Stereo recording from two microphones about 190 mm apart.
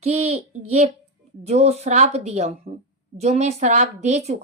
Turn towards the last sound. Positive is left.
turn(degrees=-35)  # may be behind; listen again after turning